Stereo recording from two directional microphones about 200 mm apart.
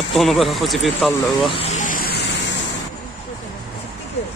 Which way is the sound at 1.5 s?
30° left (ahead or behind).